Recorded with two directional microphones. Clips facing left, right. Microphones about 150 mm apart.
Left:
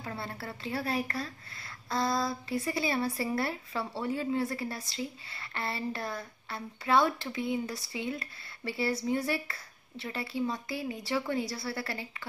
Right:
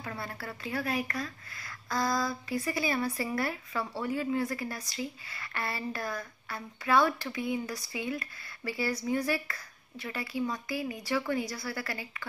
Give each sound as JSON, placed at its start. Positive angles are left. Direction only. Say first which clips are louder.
{"t": 0.0, "sound": "speech", "louder": "even", "side_deg": 25}